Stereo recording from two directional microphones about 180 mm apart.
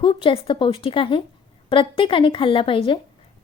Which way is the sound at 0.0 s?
30° left (ahead or behind).